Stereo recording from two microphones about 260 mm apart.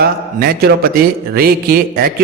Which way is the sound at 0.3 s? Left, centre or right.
Right.